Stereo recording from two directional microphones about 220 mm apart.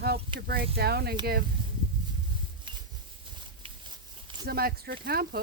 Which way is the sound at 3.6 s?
25° right (ahead or behind).